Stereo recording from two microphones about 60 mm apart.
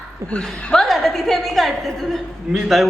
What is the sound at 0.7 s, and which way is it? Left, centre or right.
A woman's voice, centre.